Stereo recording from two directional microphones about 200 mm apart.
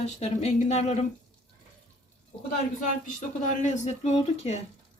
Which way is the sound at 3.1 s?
35° left (ahead or behind).